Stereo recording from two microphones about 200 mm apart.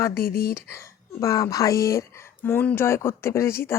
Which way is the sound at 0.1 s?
50° left (ahead or behind).